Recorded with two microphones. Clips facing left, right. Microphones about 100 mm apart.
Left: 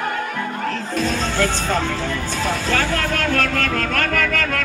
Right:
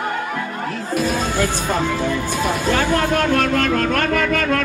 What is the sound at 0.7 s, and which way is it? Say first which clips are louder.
Speech: right 5 dB; 10° right (ahead or behind).